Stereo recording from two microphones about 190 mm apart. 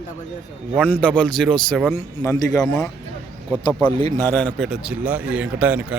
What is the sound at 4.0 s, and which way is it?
Speech, 20° left (ahead or behind).